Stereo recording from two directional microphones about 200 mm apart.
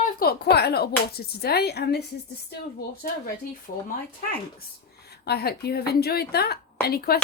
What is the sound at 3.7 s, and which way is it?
Speech, 45° left (ahead or behind).